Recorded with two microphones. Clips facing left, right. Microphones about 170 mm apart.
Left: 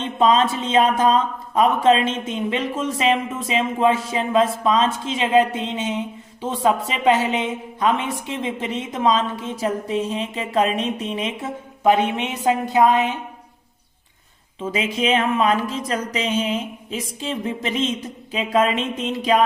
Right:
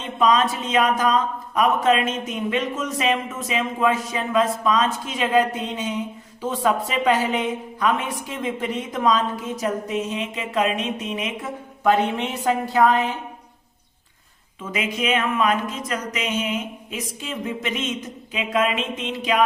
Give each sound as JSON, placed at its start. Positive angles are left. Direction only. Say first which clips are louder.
{"t": 0.0, "sound": "speech", "louder": "left 2 dB", "side_deg": 25}
{"t": 14.6, "sound": "speech", "louder": "left 3 dB", "side_deg": 30}